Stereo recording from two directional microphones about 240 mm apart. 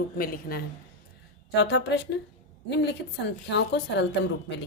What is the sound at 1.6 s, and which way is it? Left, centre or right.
Speech, left.